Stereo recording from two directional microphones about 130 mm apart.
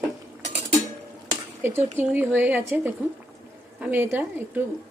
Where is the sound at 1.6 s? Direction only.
15° right (ahead or behind).